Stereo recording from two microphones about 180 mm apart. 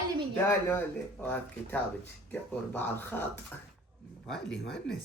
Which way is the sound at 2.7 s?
10° left (ahead or behind).